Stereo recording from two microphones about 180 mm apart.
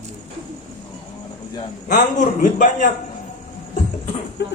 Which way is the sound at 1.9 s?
45° left (ahead or behind).